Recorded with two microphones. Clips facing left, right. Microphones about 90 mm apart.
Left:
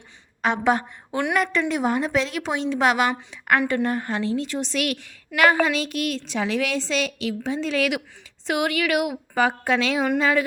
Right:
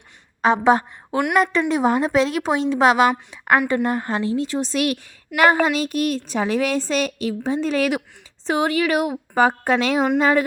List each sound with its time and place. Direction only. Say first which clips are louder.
0.4 s a woman's voice: right 5 dB; 35° right (ahead or behind)